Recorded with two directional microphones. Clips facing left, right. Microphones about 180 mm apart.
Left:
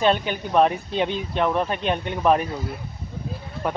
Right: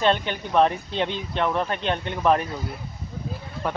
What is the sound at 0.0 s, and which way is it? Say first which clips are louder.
Speech: left 1 dB; 10° left (ahead or behind).